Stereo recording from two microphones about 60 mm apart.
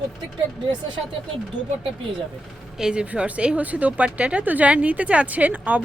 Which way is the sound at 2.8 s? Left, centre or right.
Centre.